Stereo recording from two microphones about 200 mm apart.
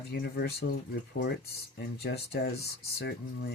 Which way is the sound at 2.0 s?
55° left (ahead or behind).